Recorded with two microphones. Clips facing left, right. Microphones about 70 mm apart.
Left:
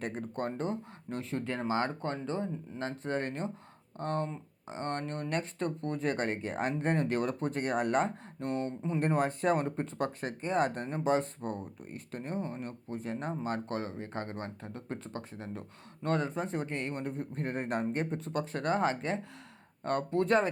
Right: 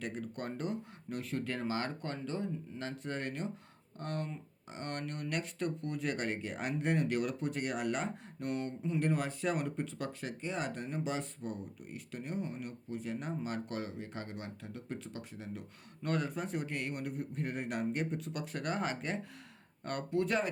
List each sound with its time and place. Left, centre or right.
0.0 s speech: left